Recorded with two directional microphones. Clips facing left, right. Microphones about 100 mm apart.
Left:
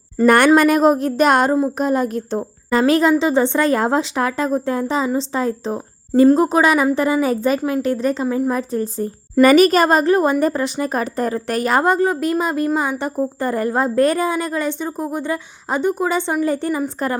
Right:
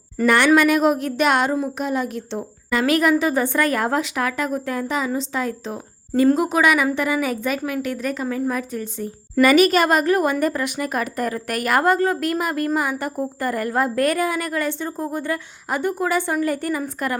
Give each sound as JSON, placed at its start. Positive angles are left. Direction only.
{"t": 0.3, "sound": "a woman's voice", "side_deg": 45}